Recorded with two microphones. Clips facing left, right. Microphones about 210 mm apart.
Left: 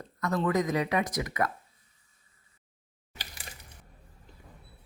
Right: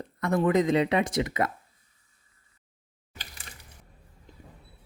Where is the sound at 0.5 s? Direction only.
30° right (ahead or behind).